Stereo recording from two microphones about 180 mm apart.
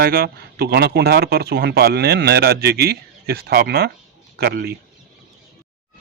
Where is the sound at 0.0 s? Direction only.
60° right (ahead or behind).